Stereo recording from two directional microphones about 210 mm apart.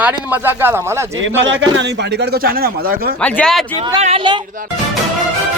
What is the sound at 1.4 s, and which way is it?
Speech, 60° right (ahead or behind).